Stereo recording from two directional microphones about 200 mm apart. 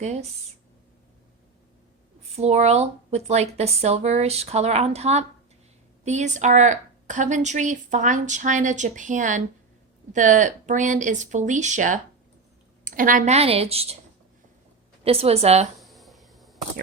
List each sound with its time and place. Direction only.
0.0 s speech: 35° right (ahead or behind)
2.3 s speech: 35° right (ahead or behind)
15.0 s speech: 30° right (ahead or behind)
15.8 s a sound: centre (ahead or behind)